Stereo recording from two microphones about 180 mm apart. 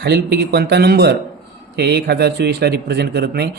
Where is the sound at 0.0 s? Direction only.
65° right (ahead or behind).